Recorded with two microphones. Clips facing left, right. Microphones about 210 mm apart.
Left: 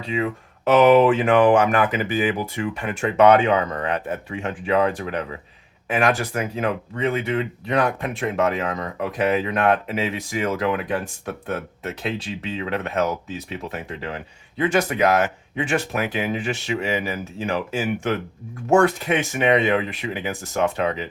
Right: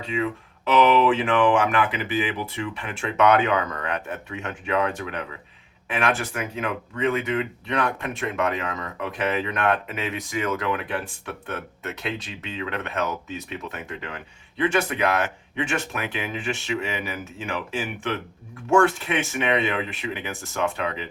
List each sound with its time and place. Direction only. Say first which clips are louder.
0.0 s speech: left 2 dB; 40° left (ahead or behind)